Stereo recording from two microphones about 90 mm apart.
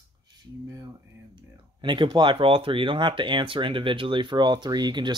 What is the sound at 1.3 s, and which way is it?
Speech, 65° right (ahead or behind).